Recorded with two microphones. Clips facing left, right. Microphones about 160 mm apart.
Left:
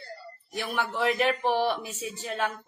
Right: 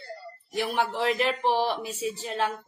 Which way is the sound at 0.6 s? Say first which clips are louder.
Right 1 dB; 30° right (ahead or behind).